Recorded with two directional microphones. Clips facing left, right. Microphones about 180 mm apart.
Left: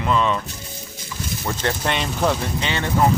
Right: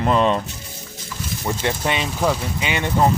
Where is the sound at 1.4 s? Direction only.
10° right (ahead or behind).